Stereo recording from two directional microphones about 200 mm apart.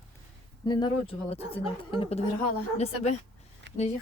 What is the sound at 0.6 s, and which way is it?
Speech, 25° left (ahead or behind).